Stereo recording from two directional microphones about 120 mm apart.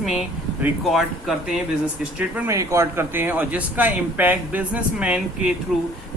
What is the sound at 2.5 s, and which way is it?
Speech, 25° right (ahead or behind).